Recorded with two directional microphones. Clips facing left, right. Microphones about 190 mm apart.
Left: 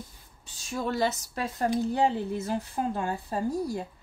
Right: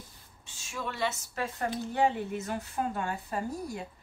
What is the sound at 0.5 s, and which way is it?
Speech, 35° left (ahead or behind).